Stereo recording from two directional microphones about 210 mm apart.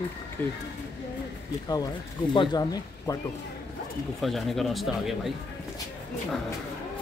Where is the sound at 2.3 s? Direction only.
20° left (ahead or behind).